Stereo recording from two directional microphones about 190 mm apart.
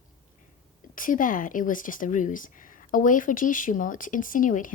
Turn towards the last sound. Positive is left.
turn(degrees=45)  # may be behind; listen again after turning